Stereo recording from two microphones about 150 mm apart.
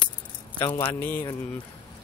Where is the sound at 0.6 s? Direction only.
30° left (ahead or behind).